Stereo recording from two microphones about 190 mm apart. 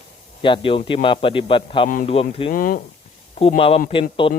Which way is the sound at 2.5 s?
45° left (ahead or behind).